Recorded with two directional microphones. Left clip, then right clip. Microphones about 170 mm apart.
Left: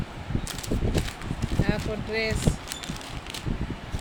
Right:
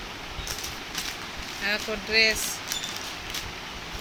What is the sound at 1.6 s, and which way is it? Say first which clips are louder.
Speech: right 3 dB; 15° left (ahead or behind).